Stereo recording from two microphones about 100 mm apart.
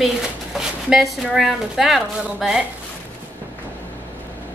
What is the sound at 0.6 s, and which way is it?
A woman's voice, 5° right (ahead or behind).